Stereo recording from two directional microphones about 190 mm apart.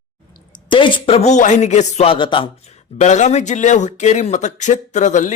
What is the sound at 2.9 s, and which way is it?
Speech, 40° left (ahead or behind).